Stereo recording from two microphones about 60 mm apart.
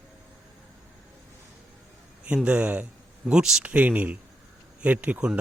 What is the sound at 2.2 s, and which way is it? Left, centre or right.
Speech, centre.